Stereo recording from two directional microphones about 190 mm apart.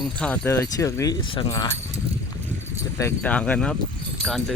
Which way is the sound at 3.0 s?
10° left (ahead or behind).